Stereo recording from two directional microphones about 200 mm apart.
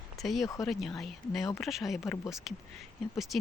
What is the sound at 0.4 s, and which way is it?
Speech, 15° left (ahead or behind).